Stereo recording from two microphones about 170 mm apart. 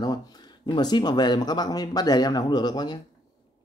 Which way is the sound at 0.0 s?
25° left (ahead or behind).